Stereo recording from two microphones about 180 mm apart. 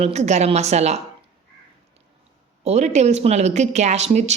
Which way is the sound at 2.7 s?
40° right (ahead or behind).